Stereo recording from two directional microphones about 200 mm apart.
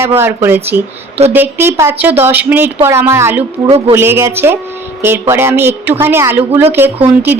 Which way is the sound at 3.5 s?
30° right (ahead or behind).